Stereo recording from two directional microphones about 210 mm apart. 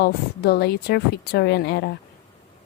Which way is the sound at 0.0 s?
50° left (ahead or behind).